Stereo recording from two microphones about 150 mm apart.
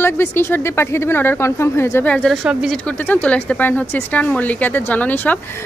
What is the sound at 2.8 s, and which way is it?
Speech, 10° left (ahead or behind).